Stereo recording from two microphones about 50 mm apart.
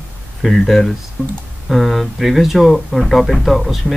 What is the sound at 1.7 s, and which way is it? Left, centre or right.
Speech, centre.